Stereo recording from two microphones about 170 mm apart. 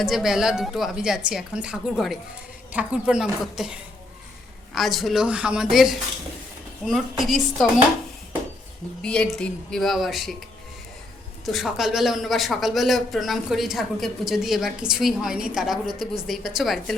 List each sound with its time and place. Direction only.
0.0 s a man's voice: centre (ahead or behind)
9.0 s a man's voice: 5° left (ahead or behind)
11.5 s a man's voice: centre (ahead or behind)